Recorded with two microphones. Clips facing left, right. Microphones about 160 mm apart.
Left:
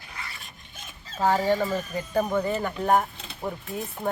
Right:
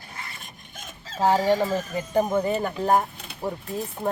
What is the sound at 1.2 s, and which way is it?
Speech, 15° right (ahead or behind).